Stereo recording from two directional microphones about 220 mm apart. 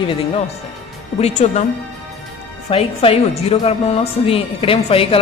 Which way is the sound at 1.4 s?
30° left (ahead or behind).